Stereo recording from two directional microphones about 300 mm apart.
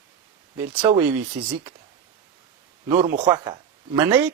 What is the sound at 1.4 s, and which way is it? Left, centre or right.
Speech, centre.